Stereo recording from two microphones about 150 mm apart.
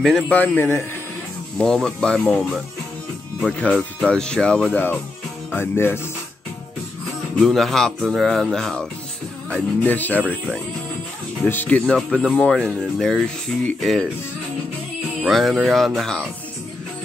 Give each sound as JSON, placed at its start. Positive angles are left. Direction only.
{"t": 0.0, "sound": "speech", "side_deg": 5}
{"t": 1.6, "sound": "speech", "side_deg": 5}
{"t": 7.3, "sound": "speech", "side_deg": 0}
{"t": 11.4, "sound": "speech", "side_deg": 10}
{"t": 15.2, "sound": "speech", "side_deg": 0}